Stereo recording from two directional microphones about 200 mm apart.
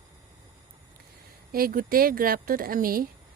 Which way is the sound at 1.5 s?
45° right (ahead or behind).